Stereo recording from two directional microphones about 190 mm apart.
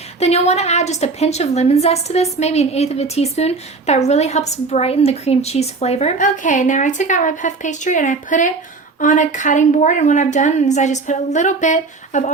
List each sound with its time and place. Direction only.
0.2 s a woman's voice: 35° left (ahead or behind)